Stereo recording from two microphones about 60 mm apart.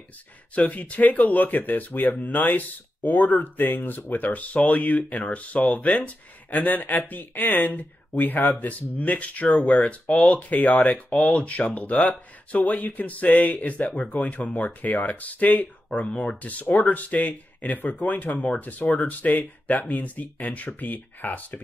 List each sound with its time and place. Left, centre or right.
0.6 s speech: left